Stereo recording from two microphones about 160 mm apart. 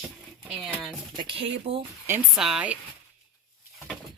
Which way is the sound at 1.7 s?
45° right (ahead or behind).